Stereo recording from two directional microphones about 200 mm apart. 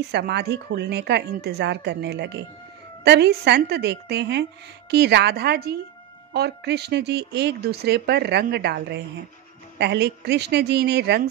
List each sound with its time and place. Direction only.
0.1 s speech: 55° right (ahead or behind)